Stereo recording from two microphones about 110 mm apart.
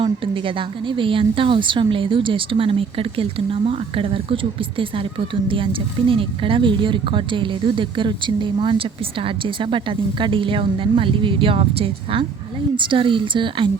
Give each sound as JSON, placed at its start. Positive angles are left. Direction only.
{"t": 0.0, "sound": "speech", "side_deg": -50}
{"t": 12.7, "sound": "speech", "side_deg": -50}